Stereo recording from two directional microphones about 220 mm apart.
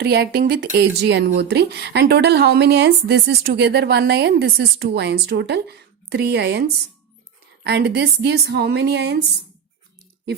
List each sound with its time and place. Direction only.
0.0 s a woman's voice: 45° right (ahead or behind)